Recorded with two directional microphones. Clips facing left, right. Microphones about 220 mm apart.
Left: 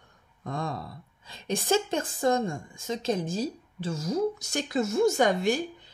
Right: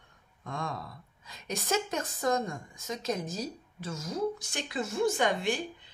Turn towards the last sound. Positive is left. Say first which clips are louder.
# left 5 dB
turn(degrees=40)  # may be behind; listen again after turning